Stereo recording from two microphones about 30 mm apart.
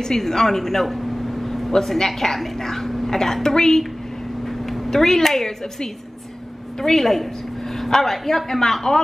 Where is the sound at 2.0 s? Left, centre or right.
Centre.